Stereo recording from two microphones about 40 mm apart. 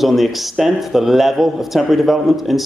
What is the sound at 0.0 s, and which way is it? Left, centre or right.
A man's voice, centre.